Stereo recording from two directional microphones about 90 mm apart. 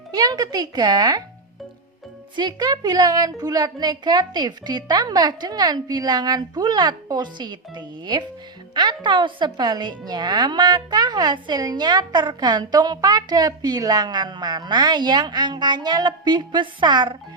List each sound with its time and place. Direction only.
0.1 s a woman's voice: 45° right (ahead or behind)
2.3 s a woman's voice: 55° right (ahead or behind)